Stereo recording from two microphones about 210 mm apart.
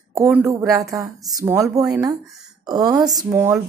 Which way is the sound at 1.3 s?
15° right (ahead or behind).